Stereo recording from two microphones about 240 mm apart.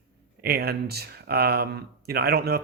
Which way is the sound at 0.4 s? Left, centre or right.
Right.